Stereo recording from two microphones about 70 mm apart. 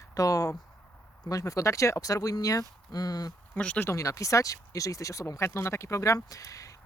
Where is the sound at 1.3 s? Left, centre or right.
Left.